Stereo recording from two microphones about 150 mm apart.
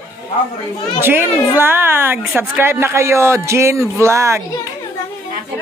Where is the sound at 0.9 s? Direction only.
15° right (ahead or behind).